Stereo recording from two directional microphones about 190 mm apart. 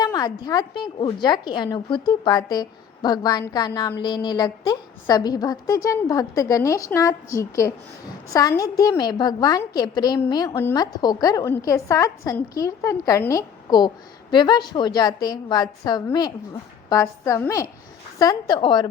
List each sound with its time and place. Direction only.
0.0 s a woman's voice: 20° left (ahead or behind)